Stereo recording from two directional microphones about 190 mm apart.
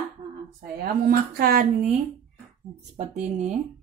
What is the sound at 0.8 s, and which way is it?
Speech, 55° right (ahead or behind).